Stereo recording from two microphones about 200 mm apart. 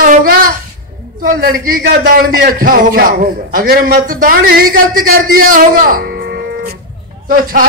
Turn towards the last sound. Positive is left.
turn(degrees=-45)  # may be behind; listen again after turning